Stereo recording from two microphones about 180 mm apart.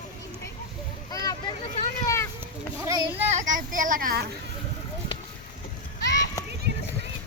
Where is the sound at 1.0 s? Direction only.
20° left (ahead or behind).